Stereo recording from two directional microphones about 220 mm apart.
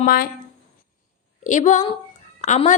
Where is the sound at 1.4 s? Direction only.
35° left (ahead or behind).